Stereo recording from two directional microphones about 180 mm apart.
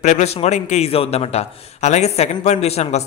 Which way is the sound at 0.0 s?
40° left (ahead or behind).